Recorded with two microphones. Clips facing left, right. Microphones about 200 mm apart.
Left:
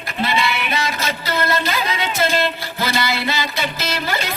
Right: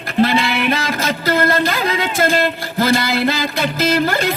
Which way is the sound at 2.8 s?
50° right (ahead or behind).